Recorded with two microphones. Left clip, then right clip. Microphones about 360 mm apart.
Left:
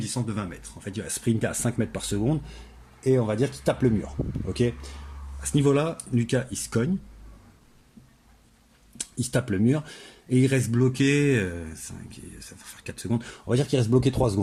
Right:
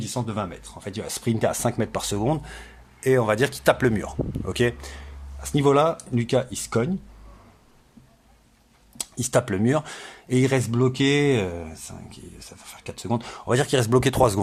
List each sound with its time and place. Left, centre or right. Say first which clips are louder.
0.0 s speech: right 4 dB; centre
2.1 s speech: right 2 dB; right
3.2 s speech: right 6 dB; right
9.0 s a sound: right 6 dB; centre
9.6 s speech: right 3 dB; centre
14.1 s speech: right 6 dB; right